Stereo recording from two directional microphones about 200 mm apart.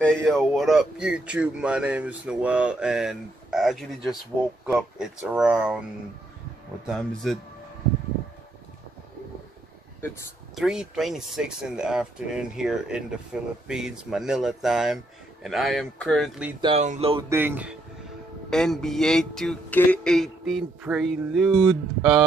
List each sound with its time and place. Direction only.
0.0 s speech: 5° left (ahead or behind)
6.9 s speech: centre (ahead or behind)
10.5 s speech: 5° right (ahead or behind)
16.6 s speech: 35° right (ahead or behind)
17.3 s speech: 10° right (ahead or behind)
18.5 s speech: 5° left (ahead or behind)